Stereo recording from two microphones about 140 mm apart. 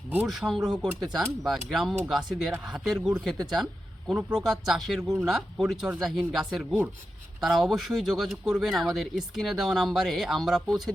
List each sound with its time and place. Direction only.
0.3 s speech: centre (ahead or behind)